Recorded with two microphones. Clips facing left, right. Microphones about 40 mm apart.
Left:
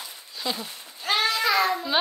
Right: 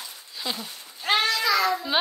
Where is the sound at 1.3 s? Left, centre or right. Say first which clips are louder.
Even; left.